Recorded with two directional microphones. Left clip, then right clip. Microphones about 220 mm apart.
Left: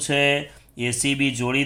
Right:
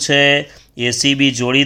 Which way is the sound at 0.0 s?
45° right (ahead or behind).